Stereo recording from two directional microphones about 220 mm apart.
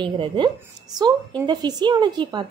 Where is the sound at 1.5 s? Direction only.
20° right (ahead or behind).